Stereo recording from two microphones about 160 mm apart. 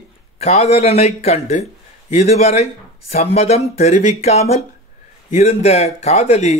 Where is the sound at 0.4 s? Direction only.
40° left (ahead or behind).